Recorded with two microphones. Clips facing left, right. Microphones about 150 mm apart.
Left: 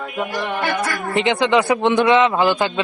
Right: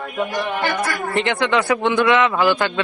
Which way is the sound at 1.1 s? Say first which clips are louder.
Left 3 dB; 20° left (ahead or behind).